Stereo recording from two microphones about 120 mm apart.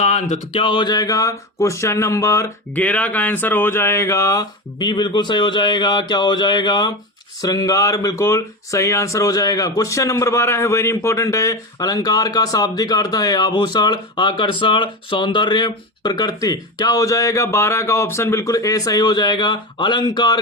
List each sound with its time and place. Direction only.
0.0 s speech: 70° left (ahead or behind)
0.5 s speech: 45° left (ahead or behind); by 2.5 s 25° left (ahead or behind)
2.7 s speech: 10° left (ahead or behind)
4.8 s speech: 40° left (ahead or behind)